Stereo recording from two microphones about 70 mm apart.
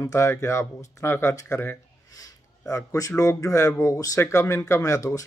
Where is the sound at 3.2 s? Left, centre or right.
Left.